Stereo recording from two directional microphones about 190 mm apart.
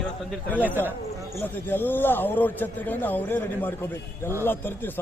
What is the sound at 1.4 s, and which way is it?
A man's voice, 10° left (ahead or behind).